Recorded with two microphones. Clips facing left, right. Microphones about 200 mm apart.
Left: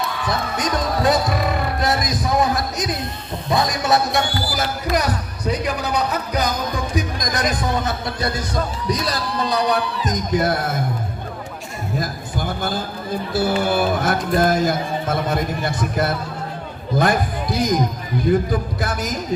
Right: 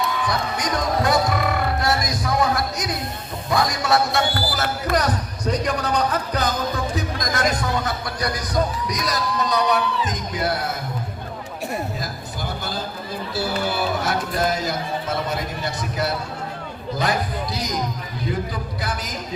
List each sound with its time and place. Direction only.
0.3 s basketball bounce: 20° left (ahead or behind)
1.0 s music: 20° left (ahead or behind)
3.5 s a sound: 20° left (ahead or behind)
6.9 s music: 15° left (ahead or behind); by 10.8 s 50° left (ahead or behind)
11.9 s a sound: 50° left (ahead or behind)
13.3 s music: 50° left (ahead or behind)
17.0 s speech: 50° left (ahead or behind)